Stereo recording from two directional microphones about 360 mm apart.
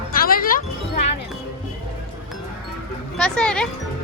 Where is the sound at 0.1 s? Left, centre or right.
Left.